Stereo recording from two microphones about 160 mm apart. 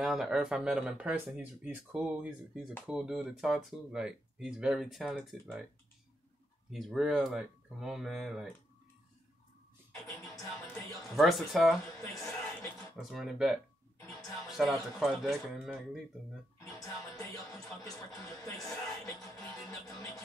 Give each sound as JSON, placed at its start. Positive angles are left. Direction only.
{"t": 0.0, "sound": "speech", "side_deg": 0}
{"t": 6.7, "sound": "speech", "side_deg": 0}
{"t": 10.0, "sound": "music", "side_deg": 0}
{"t": 12.9, "sound": "speech", "side_deg": 0}
{"t": 14.6, "sound": "speech", "side_deg": 0}
{"t": 17.1, "sound": "music", "side_deg": 20}
{"t": 18.6, "sound": "speech", "side_deg": 0}